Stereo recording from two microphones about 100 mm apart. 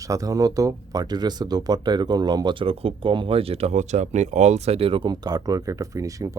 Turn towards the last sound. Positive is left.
turn(degrees=-35)  # may be behind; listen again after turning